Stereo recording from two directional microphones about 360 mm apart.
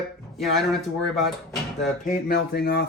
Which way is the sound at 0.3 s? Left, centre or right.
Centre.